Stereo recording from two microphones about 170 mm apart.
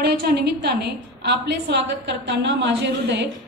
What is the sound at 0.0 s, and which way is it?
A woman's voice, 75° right (ahead or behind).